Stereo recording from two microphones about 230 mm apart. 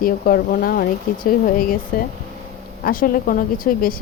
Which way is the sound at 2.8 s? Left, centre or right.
Left.